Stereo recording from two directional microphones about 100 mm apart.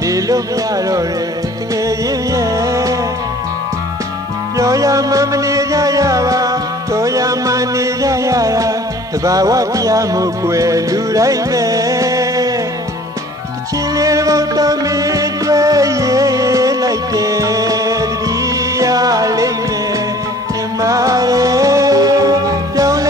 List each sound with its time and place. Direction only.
1.9 s music: 35° right (ahead or behind)
4.6 s music: 35° right (ahead or behind)
13.9 s music: 35° right (ahead or behind)
20.8 s music: 35° right (ahead or behind)